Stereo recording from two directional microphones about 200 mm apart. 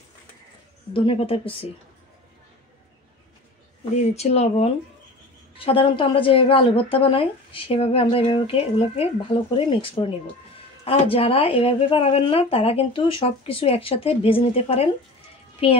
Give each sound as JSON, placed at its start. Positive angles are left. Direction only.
{"t": 0.9, "sound": "a woman's voice", "side_deg": 25}
{"t": 4.0, "sound": "a woman's voice", "side_deg": 30}